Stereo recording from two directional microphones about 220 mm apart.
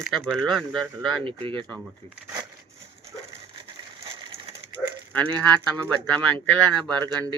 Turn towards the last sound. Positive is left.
turn(degrees=-15)  # may be behind; listen again after turning